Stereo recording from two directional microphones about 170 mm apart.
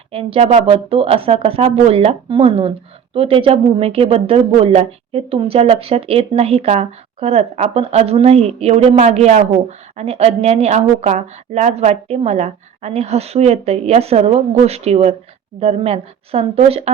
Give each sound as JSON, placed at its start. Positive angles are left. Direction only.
{"t": 0.1, "sound": "speech", "side_deg": -35}